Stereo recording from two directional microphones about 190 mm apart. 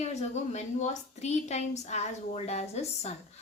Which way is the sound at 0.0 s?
35° left (ahead or behind).